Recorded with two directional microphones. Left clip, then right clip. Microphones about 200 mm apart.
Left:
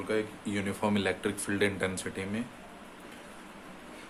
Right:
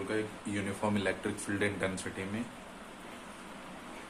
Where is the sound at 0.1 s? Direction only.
35° left (ahead or behind).